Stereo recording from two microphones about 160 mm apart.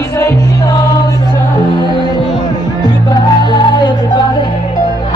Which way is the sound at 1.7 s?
25° left (ahead or behind).